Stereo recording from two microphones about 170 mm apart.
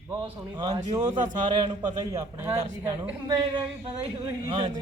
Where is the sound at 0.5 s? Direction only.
25° right (ahead or behind).